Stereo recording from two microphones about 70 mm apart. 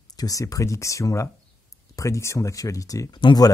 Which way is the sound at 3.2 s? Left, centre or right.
Left.